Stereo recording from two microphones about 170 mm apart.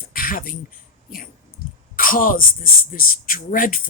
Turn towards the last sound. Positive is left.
turn(degrees=55)  # may be behind; listen again after turning